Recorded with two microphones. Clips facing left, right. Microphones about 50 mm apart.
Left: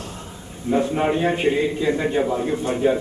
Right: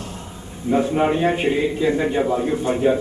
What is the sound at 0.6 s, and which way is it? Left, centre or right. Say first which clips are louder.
A man's voice: right 2 dB; centre.